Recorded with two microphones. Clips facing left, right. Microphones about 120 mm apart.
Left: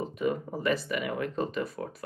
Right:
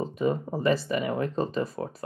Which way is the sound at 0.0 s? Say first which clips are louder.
Right 3 dB; 30° right (ahead or behind).